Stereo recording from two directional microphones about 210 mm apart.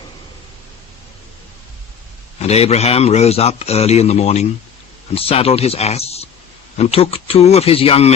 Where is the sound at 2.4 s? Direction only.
30° left (ahead or behind).